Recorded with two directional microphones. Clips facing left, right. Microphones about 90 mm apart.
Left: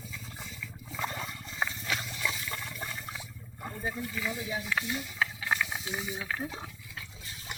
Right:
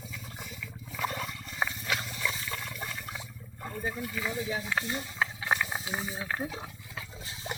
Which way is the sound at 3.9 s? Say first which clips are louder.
Right 1 dB; 10° right (ahead or behind).